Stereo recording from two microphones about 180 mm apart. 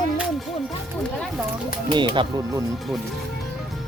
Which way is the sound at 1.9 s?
25° right (ahead or behind).